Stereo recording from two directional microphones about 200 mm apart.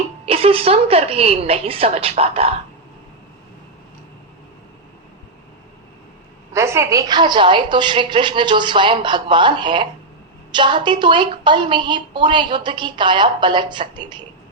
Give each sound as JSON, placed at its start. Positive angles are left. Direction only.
{"t": 0.3, "sound": "a woman's voice", "side_deg": -30}
{"t": 6.5, "sound": "a woman's voice", "side_deg": -15}